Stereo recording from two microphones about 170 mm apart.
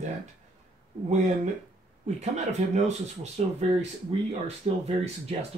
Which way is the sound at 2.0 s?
45° right (ahead or behind).